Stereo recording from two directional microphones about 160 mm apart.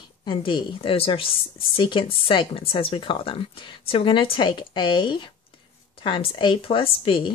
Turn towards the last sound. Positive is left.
turn(degrees=35)  # may be behind; listen again after turning